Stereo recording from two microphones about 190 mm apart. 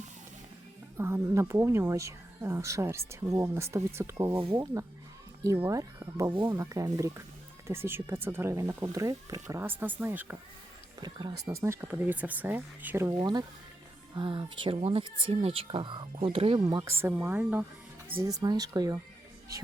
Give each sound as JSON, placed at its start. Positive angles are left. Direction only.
{"t": 0.9, "sound": "speech", "side_deg": -15}
{"t": 4.4, "sound": "speech", "side_deg": -25}
{"t": 4.6, "sound": "speech", "side_deg": -15}
{"t": 11.0, "sound": "speech", "side_deg": -20}
{"t": 13.1, "sound": "speech", "side_deg": -25}
{"t": 17.0, "sound": "speech", "side_deg": -10}